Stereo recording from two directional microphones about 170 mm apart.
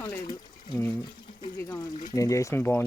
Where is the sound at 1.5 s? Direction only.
15° left (ahead or behind).